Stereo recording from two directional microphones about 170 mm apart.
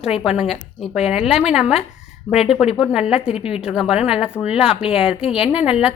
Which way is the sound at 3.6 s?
5° right (ahead or behind).